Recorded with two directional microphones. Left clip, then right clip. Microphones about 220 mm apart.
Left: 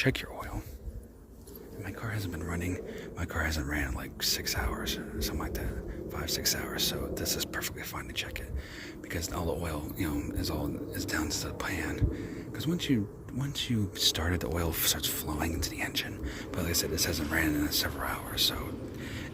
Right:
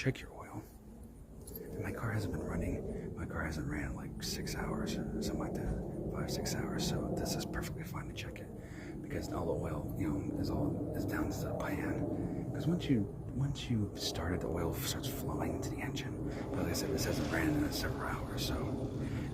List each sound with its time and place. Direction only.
2.0 s speech: 40° left (ahead or behind)